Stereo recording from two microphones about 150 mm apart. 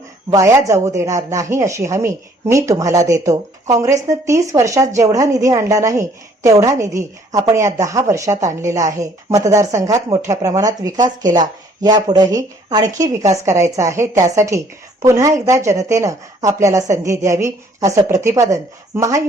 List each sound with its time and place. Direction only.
0.3 s speech: 20° right (ahead or behind)